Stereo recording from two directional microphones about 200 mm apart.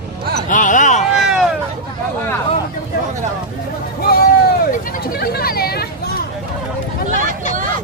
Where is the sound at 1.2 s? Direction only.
Centre (ahead or behind).